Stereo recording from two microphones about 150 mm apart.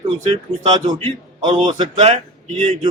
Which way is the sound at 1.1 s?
35° right (ahead or behind).